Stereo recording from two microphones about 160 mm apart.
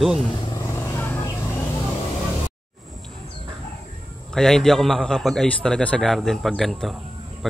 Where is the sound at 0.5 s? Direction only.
15° left (ahead or behind).